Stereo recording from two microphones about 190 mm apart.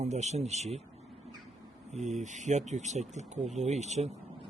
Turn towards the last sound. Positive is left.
turn(degrees=-35)  # may be behind; listen again after turning